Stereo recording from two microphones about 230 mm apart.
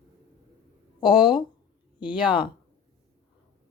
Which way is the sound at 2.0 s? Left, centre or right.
Centre.